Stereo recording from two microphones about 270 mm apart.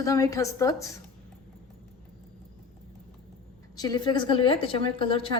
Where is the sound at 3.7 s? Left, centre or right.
Centre.